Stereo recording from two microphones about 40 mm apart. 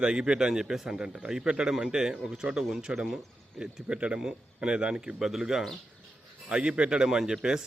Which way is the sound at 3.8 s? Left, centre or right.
Right.